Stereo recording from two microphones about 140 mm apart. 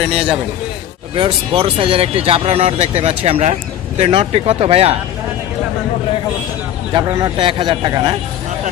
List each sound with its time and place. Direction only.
1.1 s speech: 35° right (ahead or behind)
6.9 s speech: 30° right (ahead or behind)